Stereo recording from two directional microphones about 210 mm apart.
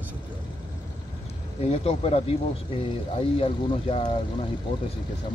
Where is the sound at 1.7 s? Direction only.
30° left (ahead or behind).